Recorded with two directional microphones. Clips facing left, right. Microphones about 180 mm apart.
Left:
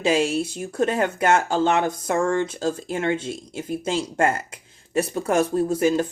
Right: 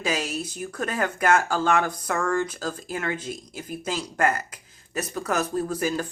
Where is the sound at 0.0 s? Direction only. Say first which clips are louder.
Left 7 dB; 25° left (ahead or behind).